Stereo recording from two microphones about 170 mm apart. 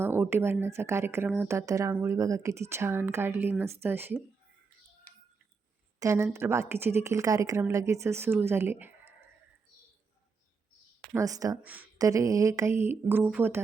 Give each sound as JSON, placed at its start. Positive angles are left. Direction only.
{"t": 0.0, "sound": "a woman's voice", "side_deg": -15}
{"t": 6.0, "sound": "a woman's voice", "side_deg": -20}
{"t": 11.1, "sound": "speech", "side_deg": -20}
{"t": 11.6, "sound": "a woman's voice", "side_deg": -10}